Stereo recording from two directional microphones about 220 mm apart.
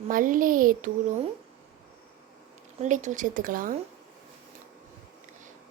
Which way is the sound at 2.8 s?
35° right (ahead or behind).